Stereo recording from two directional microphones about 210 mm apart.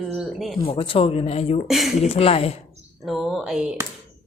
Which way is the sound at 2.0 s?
30° left (ahead or behind).